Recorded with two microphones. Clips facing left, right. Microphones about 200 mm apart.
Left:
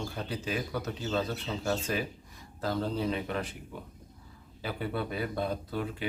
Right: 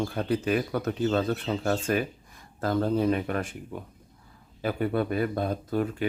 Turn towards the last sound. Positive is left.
turn(degrees=-50)  # may be behind; listen again after turning